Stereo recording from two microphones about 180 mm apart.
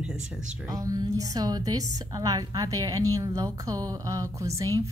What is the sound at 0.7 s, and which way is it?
A woman's voice, 20° right (ahead or behind).